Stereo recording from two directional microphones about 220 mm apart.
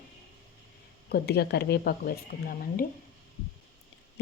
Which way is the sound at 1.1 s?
45° left (ahead or behind).